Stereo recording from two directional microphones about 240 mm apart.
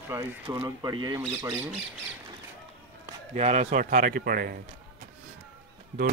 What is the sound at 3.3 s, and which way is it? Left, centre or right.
Speech, right.